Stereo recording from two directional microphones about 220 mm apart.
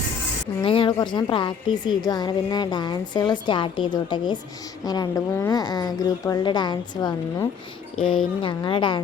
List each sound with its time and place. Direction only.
0.6 s a woman's voice: 25° left (ahead or behind)
7.9 s speech: 5° left (ahead or behind)
8.4 s a woman's voice: 20° left (ahead or behind)